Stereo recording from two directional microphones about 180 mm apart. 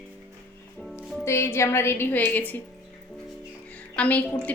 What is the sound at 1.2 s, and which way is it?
A woman's voice, 15° left (ahead or behind).